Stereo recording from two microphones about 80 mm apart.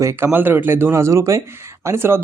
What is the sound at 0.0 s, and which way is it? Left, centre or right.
Speech, right.